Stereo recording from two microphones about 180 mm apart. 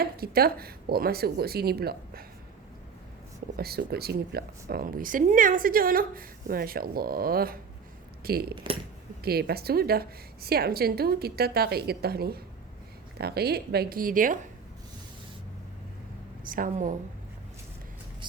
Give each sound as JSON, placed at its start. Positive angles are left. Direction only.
{"t": 0.0, "sound": "a woman's voice", "side_deg": -55}
{"t": 3.6, "sound": "a woman's voice", "side_deg": -60}
{"t": 8.5, "sound": "speech", "side_deg": -30}
{"t": 9.2, "sound": "a woman's voice", "side_deg": -60}
{"t": 16.5, "sound": "speech", "side_deg": -45}